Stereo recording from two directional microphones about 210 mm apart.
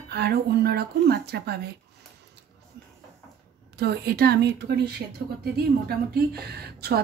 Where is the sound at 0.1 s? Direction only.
50° right (ahead or behind).